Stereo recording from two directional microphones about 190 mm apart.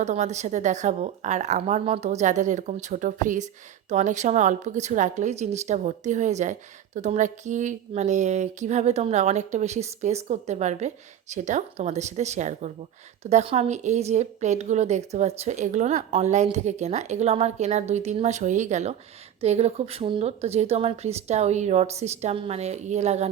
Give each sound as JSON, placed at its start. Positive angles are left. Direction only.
{"t": 0.0, "sound": "a woman's voice", "side_deg": -35}